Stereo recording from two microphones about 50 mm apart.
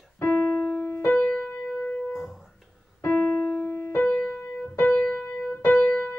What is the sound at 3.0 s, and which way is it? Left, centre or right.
Keyboard, left.